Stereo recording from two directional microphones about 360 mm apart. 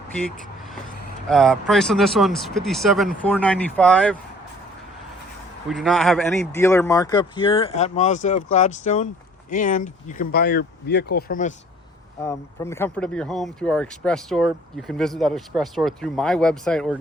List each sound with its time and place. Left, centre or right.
1.3 s speech: centre
5.6 s speech: centre; by 11.5 s left
12.2 s speech: centre